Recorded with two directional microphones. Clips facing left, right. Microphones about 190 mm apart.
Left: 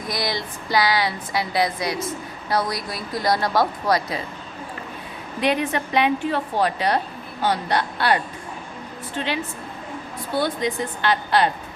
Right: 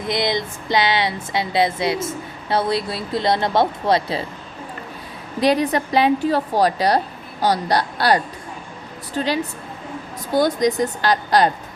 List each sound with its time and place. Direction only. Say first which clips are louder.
0.1 s a woman's voice: right 6 dB; 20° right (ahead or behind)
5.4 s a woman's voice: right 4 dB; 35° right (ahead or behind)